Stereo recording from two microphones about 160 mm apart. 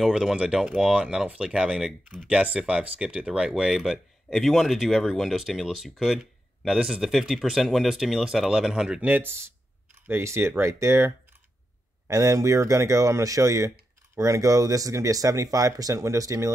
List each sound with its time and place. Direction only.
0.0 s speech: centre (ahead or behind); by 16.5 s 20° right (ahead or behind)